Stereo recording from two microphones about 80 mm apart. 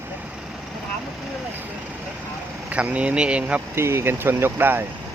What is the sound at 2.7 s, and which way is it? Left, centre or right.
Speech, centre.